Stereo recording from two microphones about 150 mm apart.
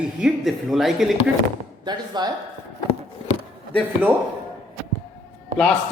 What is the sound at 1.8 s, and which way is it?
Speech, 30° right (ahead or behind).